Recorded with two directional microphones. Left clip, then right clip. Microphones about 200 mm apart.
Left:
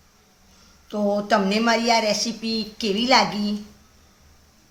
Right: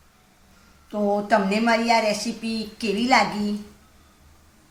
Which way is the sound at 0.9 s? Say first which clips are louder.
Even; 35° left (ahead or behind).